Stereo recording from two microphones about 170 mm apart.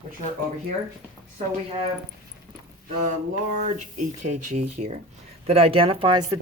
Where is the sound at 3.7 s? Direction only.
50° right (ahead or behind).